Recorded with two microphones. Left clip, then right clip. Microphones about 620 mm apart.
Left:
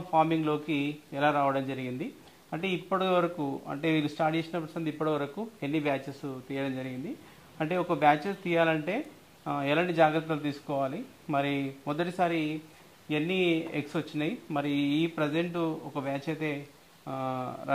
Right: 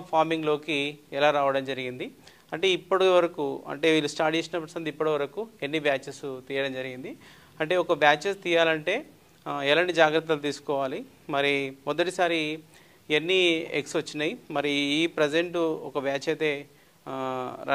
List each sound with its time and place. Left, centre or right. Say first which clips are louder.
0.1 s speech: right 2 dB; right